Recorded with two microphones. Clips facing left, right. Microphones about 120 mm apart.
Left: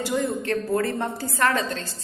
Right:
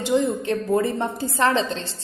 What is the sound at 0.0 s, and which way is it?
A woman's voice, 20° right (ahead or behind).